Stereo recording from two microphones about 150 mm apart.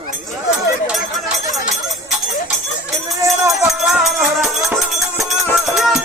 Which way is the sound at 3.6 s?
Centre (ahead or behind).